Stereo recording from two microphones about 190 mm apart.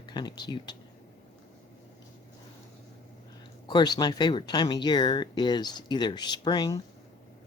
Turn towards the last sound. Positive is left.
turn(degrees=20)  # may be behind; listen again after turning